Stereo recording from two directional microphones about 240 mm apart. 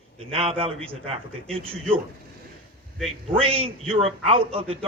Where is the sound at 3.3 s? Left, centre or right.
Right.